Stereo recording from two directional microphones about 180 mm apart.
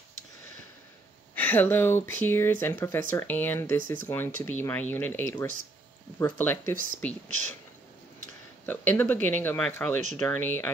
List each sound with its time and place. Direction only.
1.3 s speech: 10° left (ahead or behind)
3.7 s speech: 50° right (ahead or behind)
4.1 s speech: 10° left (ahead or behind)
8.6 s speech: 10° left (ahead or behind)